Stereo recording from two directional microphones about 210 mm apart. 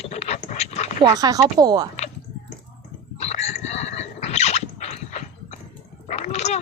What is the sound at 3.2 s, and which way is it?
Dog, 30° left (ahead or behind).